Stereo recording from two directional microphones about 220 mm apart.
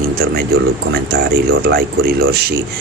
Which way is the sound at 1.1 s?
45° right (ahead or behind).